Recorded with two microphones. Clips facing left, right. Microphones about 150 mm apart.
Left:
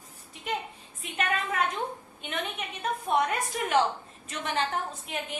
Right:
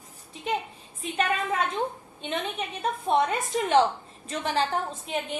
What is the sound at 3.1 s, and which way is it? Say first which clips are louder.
A woman's voice: right 3 dB; 25° right (ahead or behind).